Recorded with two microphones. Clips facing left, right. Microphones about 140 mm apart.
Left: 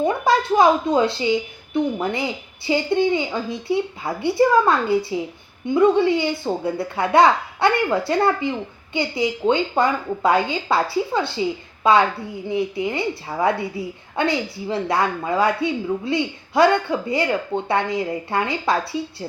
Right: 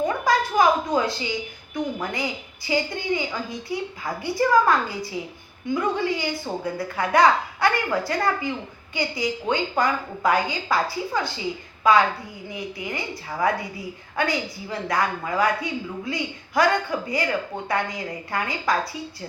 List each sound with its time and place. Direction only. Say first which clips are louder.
0.0 s a woman's voice: left 3 dB; 25° left (ahead or behind)